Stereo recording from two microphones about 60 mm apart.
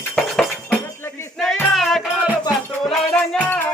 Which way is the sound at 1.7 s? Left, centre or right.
Centre.